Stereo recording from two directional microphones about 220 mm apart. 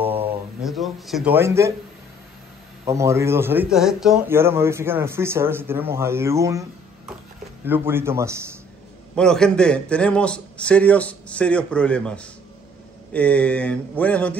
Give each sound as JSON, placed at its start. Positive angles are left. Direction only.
{"t": 0.0, "sound": "a sound", "side_deg": -10}
{"t": 2.8, "sound": "a man's voice", "side_deg": -15}
{"t": 7.6, "sound": "a man's voice", "side_deg": -10}
{"t": 9.1, "sound": "a man's voice", "side_deg": 5}